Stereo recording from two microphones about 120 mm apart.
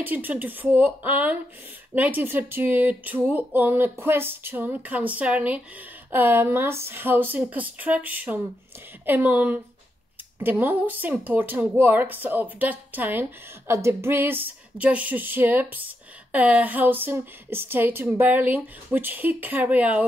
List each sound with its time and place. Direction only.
0.0 s speech: 15° right (ahead or behind)